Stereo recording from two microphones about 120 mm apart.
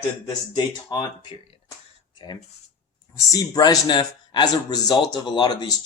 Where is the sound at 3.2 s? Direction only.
30° left (ahead or behind).